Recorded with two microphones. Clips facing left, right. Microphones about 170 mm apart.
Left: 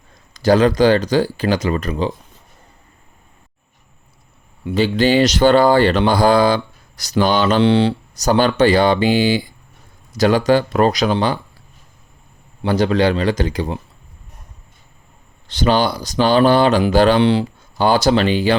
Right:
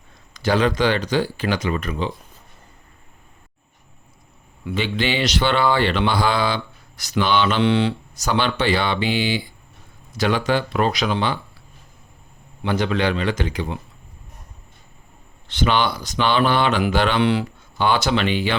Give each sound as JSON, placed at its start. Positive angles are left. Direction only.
{"t": 0.3, "sound": "speech", "side_deg": 40}
{"t": 4.7, "sound": "speech", "side_deg": 40}
{"t": 12.6, "sound": "speech", "side_deg": 35}
{"t": 15.4, "sound": "speech", "side_deg": 40}